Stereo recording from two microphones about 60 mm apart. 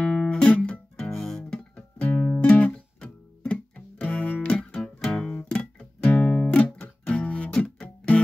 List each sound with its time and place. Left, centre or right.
0.0 s music: centre
1.1 s guitar: centre
1.5 s music: centre